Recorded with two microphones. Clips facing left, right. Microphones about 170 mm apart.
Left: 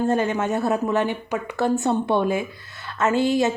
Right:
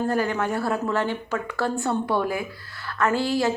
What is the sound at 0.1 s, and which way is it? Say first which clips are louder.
A woman's voice: left 2 dB; 20° left (ahead or behind).